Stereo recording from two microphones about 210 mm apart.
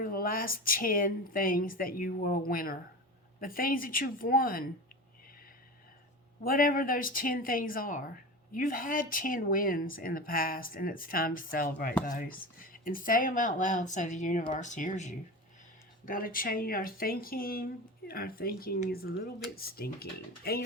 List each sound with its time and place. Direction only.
0.0 s speech: 45° left (ahead or behind)
6.4 s speech: 40° left (ahead or behind)